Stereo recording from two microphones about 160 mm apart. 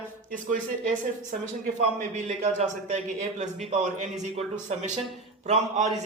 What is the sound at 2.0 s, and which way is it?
A man's voice, 45° right (ahead or behind).